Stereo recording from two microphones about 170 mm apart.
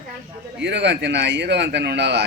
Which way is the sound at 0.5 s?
90° right.